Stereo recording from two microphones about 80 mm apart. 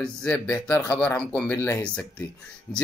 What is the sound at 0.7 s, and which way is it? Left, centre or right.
Speech, left.